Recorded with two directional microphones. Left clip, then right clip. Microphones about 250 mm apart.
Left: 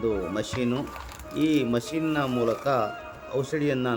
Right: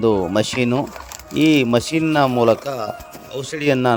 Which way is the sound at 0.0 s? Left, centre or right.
Right.